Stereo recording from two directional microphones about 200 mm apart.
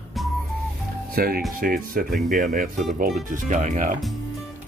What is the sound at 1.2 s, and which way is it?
Speech, 45° right (ahead or behind).